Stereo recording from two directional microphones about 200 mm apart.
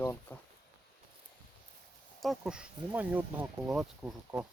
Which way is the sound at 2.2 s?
Centre (ahead or behind).